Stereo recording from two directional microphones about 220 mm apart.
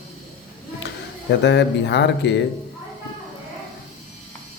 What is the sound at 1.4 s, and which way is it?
Speech, 50° left (ahead or behind).